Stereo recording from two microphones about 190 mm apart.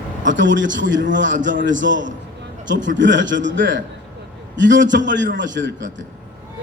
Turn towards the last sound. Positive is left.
turn(degrees=-70)  # may be behind; listen again after turning